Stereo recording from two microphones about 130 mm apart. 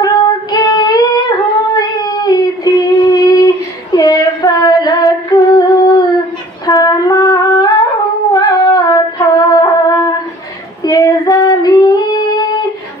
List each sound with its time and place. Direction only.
0.0 s singing: 30° left (ahead or behind)
6.6 s a sound: 30° left (ahead or behind)
8.3 s female singing: 30° left (ahead or behind)
10.8 s child singing: 30° left (ahead or behind)